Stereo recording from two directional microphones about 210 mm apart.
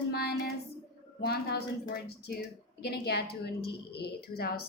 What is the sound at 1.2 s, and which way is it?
Speech, 50° left (ahead or behind).